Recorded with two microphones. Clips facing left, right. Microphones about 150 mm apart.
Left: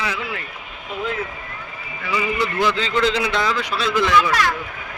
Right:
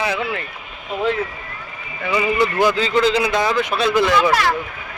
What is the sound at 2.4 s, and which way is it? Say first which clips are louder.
Speech: right 4 dB; 45° right (ahead or behind).